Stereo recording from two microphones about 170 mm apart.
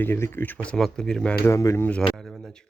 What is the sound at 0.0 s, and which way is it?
Speech, 15° left (ahead or behind).